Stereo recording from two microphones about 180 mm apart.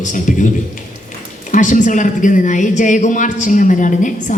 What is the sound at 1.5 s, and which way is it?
A man's voice, 45° left (ahead or behind).